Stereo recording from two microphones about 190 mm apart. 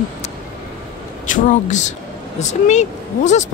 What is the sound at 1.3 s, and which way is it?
A woman's voice, 40° left (ahead or behind).